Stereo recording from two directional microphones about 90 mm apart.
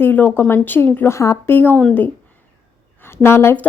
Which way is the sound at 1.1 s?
35° left (ahead or behind).